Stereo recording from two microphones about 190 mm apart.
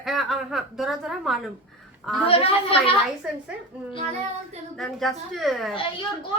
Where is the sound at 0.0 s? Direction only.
Centre (ahead or behind).